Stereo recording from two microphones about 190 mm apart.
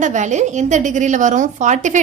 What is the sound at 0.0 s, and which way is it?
A woman's voice, 40° right (ahead or behind).